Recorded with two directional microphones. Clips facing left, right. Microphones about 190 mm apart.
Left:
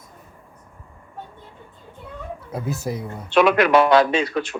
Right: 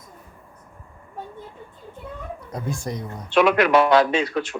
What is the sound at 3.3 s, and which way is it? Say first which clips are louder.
Speech: left 1 dB; 70° left (ahead or behind).